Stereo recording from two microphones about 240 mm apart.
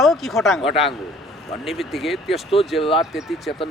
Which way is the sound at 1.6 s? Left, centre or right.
Centre.